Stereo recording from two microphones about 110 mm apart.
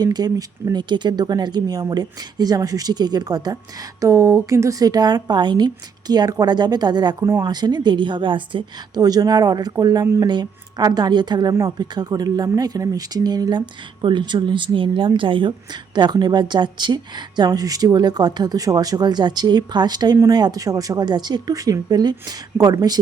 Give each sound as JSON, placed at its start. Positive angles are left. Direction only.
{"t": 0.0, "sound": "a woman's voice", "side_deg": -35}
{"t": 9.0, "sound": "speech", "side_deg": -35}